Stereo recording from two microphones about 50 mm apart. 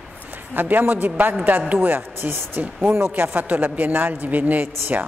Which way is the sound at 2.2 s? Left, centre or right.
Right.